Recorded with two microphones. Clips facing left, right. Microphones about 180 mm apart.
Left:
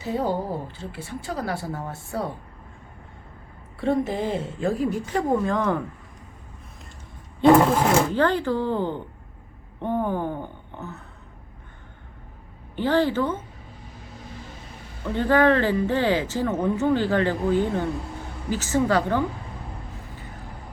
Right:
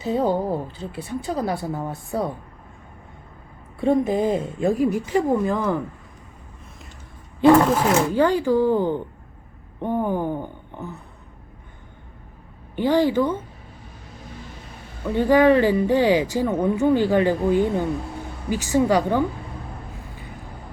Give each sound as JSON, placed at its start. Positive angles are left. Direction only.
{"t": 0.0, "sound": "speech", "side_deg": -20}
{"t": 3.8, "sound": "speech", "side_deg": -15}
{"t": 8.1, "sound": "speech", "side_deg": -10}
{"t": 12.7, "sound": "speech", "side_deg": -15}
{"t": 15.0, "sound": "speech", "side_deg": -15}